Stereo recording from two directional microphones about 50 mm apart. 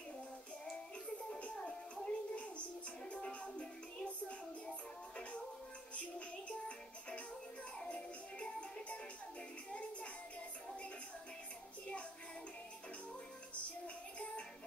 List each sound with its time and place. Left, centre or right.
1.3 s music: left
7.8 s music: left